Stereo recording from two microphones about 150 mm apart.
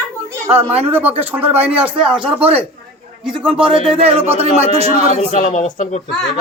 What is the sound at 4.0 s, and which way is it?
Speech, 45° right (ahead or behind).